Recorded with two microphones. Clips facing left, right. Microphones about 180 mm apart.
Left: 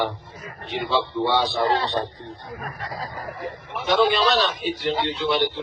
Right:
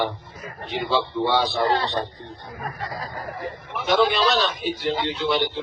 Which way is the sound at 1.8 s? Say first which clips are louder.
Left 1 dB; 25° left (ahead or behind).